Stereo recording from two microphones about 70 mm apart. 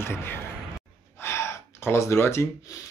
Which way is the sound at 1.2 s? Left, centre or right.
Left.